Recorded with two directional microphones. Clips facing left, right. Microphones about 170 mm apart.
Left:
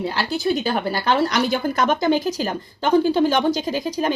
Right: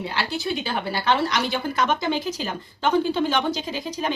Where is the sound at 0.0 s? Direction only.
40° left (ahead or behind).